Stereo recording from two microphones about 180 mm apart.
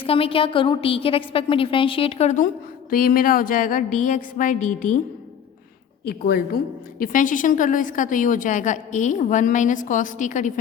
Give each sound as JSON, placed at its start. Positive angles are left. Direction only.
{"t": 0.0, "sound": "a woman's voice", "side_deg": 30}
{"t": 2.9, "sound": "a woman's voice", "side_deg": 50}
{"t": 6.1, "sound": "a woman's voice", "side_deg": 60}
{"t": 7.0, "sound": "a woman's voice", "side_deg": 45}